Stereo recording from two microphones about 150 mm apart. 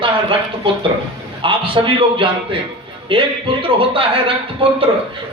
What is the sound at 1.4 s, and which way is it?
Speech, 35° right (ahead or behind).